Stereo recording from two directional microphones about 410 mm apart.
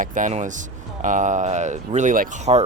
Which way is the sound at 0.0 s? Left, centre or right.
Centre.